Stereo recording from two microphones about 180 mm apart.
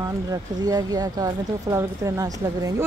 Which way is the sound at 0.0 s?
20° right (ahead or behind).